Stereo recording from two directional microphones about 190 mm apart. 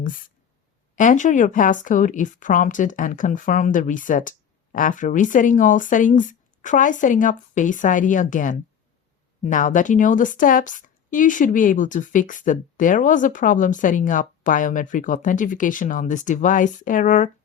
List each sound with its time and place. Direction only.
0.9 s a woman's voice: 40° left (ahead or behind)